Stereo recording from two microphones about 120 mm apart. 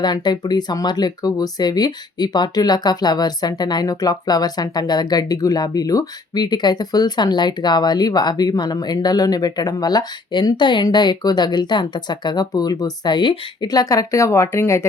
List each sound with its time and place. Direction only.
0.0 s speech: 35° left (ahead or behind)